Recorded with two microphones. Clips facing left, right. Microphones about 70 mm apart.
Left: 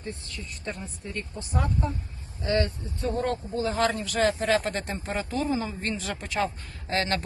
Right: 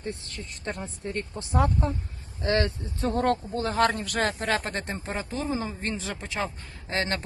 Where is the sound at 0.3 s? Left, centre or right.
Right.